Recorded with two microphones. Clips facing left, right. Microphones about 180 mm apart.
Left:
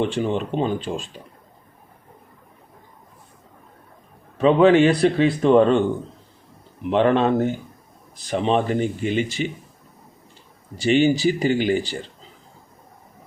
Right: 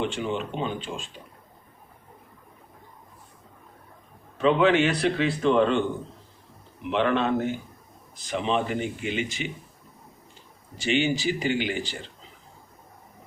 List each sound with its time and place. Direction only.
0.0 s speech: 40° left (ahead or behind)
4.4 s speech: 40° left (ahead or behind)
6.9 s speech: 45° left (ahead or behind)
10.8 s speech: 40° left (ahead or behind)